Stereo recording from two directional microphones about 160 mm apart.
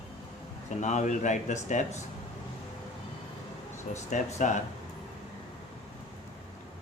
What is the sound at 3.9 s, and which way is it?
Speech, 50° left (ahead or behind).